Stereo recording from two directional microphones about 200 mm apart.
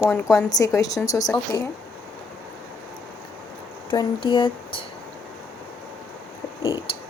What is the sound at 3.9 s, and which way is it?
Speech, 25° left (ahead or behind).